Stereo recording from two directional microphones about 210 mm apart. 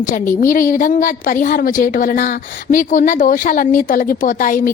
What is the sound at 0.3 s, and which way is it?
A woman's voice, 40° left (ahead or behind).